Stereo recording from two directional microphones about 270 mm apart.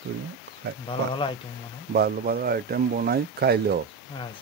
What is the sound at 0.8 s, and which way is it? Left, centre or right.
Speech, centre.